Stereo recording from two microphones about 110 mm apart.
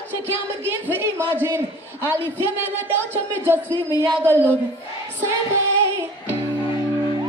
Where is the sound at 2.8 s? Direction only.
20° right (ahead or behind).